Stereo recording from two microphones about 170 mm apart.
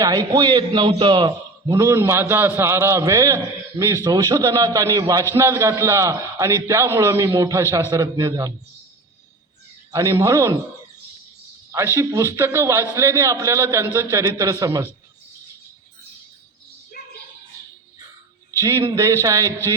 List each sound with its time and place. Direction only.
0.0 s a man's voice: 20° right (ahead or behind)
9.9 s a man's voice: 20° right (ahead or behind)
11.9 s a man's voice: 15° right (ahead or behind)
18.6 s a man's voice: 20° right (ahead or behind)